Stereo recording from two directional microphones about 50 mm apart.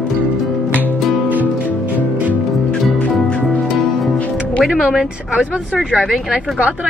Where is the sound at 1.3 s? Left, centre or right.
Right.